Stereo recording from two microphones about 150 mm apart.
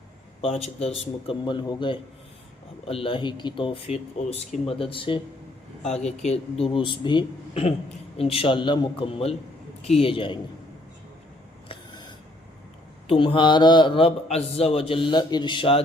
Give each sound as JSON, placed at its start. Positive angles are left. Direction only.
{"t": 0.4, "sound": "a man's voice", "side_deg": 45}
{"t": 5.8, "sound": "a man's voice", "side_deg": 45}
{"t": 11.7, "sound": "a sound", "side_deg": 30}
{"t": 13.1, "sound": "a man's voice", "side_deg": 35}